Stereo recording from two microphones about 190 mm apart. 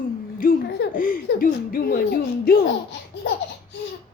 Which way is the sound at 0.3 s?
50° left (ahead or behind).